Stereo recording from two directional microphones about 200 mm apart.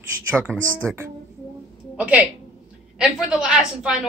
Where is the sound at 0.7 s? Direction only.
15° right (ahead or behind).